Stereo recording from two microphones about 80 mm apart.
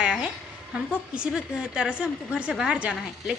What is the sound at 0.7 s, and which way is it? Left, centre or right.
A woman's voice, centre.